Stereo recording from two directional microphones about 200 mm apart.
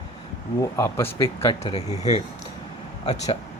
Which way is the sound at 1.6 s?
30° left (ahead or behind).